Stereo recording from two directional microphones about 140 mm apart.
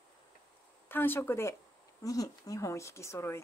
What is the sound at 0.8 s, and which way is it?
A woman's voice, 15° left (ahead or behind).